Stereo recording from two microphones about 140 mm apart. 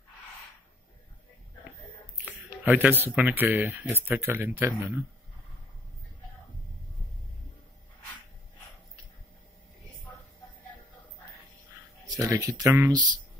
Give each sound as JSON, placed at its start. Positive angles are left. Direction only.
{"t": 2.2, "sound": "speech", "side_deg": -10}
{"t": 12.1, "sound": "speech", "side_deg": -25}